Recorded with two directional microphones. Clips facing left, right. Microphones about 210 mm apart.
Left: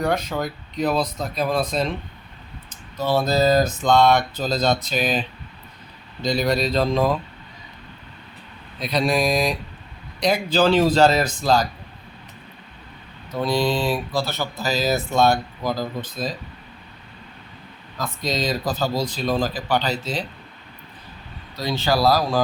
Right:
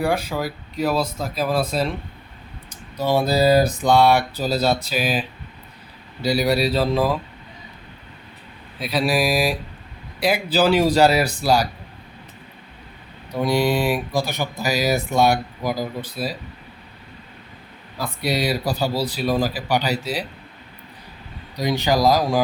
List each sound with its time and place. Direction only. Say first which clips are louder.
0.0 s speech: right 1 dB; 10° right (ahead or behind)
3.0 s speech: right 1 dB; 15° right (ahead or behind)
6.2 s speech: right 2 dB; 10° right (ahead or behind)
8.8 s speech: even; 5° right (ahead or behind)
13.3 s speech: right 2 dB; 15° right (ahead or behind)
17.9 s speech: right 2 dB; 10° right (ahead or behind)
21.5 s speech: right 2 dB; 15° right (ahead or behind)